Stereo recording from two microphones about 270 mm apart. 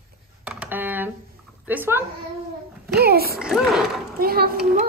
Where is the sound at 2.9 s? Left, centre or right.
Right.